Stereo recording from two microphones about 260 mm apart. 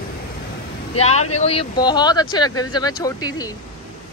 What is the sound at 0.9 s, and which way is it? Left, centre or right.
Speech, left.